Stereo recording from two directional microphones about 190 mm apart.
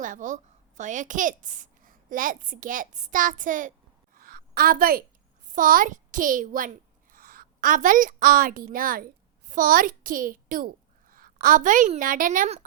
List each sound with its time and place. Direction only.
0.0 s a woman's voice: 40° right (ahead or behind)
4.1 s a sound: 50° right (ahead or behind)
5.5 s a woman's voice: 45° right (ahead or behind)